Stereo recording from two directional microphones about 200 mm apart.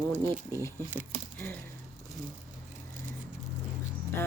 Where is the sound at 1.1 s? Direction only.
30° right (ahead or behind).